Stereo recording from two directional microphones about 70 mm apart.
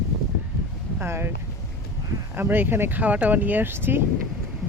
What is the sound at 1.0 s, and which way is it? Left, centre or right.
Speech, right.